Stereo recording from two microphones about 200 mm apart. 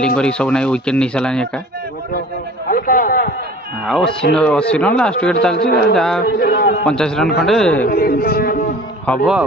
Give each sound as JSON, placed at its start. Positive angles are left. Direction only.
{"t": 0.0, "sound": "speech", "side_deg": 5}
{"t": 2.7, "sound": "a sound", "side_deg": 45}
{"t": 3.8, "sound": "speech", "side_deg": 0}
{"t": 6.2, "sound": "a man's voice", "side_deg": 50}
{"t": 6.9, "sound": "speech", "side_deg": 5}
{"t": 7.9, "sound": "a man's voice", "side_deg": 50}
{"t": 9.0, "sound": "a man's voice", "side_deg": 5}